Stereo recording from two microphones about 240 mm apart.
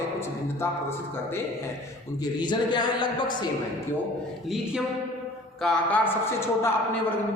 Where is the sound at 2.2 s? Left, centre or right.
Centre.